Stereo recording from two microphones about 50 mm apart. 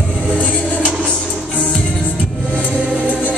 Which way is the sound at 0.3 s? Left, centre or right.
Right.